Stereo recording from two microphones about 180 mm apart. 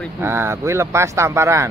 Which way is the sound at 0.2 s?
15° right (ahead or behind).